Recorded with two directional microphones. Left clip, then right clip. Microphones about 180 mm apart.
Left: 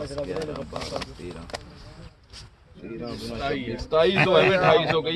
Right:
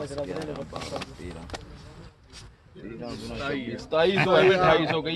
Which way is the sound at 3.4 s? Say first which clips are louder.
Left 3 dB; 40° left (ahead or behind).